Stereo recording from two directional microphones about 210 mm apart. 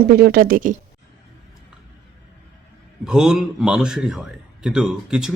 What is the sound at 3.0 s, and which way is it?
A man's voice, centre (ahead or behind).